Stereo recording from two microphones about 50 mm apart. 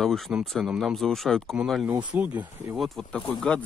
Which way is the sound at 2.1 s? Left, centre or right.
Right.